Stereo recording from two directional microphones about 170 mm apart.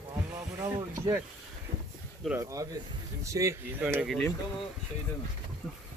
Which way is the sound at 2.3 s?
20° right (ahead or behind).